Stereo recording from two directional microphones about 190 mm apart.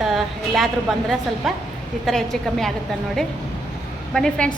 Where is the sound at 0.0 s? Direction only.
Centre (ahead or behind).